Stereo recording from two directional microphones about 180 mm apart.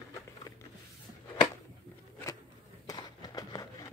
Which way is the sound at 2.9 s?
20° left (ahead or behind).